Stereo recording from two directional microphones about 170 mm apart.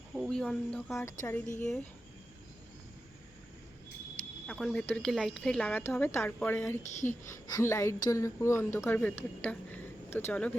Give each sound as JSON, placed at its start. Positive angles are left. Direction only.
{"t": 0.1, "sound": "speech", "side_deg": 0}
{"t": 0.9, "sound": "speech", "side_deg": 15}
{"t": 4.4, "sound": "speech", "side_deg": 5}
{"t": 6.8, "sound": "speech", "side_deg": 45}
{"t": 7.3, "sound": "speech", "side_deg": 20}